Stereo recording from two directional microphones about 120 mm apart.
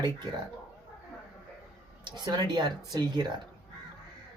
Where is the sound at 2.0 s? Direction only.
35° right (ahead or behind).